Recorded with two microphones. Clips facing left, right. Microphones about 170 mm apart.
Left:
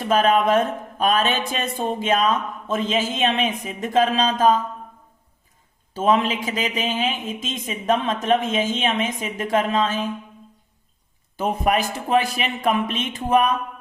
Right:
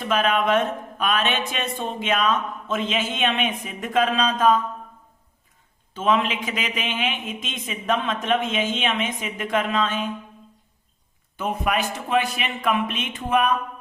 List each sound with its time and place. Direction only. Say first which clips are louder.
0.1 s speech: left 3 dB; 40° left (ahead or behind)
5.9 s speech: left 2 dB; 40° left (ahead or behind)
11.3 s speech: left 3 dB; 35° left (ahead or behind)